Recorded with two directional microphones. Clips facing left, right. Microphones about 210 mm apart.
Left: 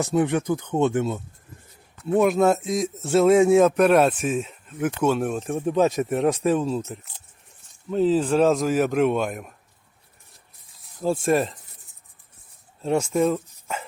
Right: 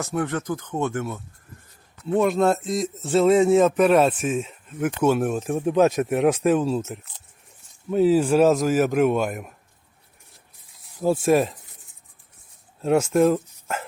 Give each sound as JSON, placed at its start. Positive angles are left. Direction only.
{"t": 0.0, "sound": "speech", "side_deg": 20}
{"t": 2.0, "sound": "speech", "side_deg": 5}
{"t": 11.0, "sound": "speech", "side_deg": -5}
{"t": 12.8, "sound": "speech", "side_deg": -5}